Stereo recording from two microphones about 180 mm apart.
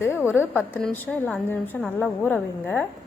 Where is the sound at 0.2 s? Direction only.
10° right (ahead or behind).